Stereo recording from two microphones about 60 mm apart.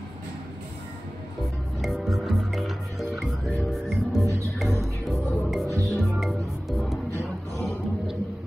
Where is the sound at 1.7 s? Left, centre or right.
Centre.